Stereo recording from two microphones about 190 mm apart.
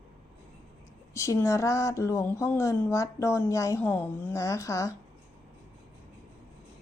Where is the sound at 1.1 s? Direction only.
15° left (ahead or behind).